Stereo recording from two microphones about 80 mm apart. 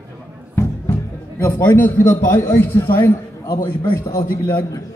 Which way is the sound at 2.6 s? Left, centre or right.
Left.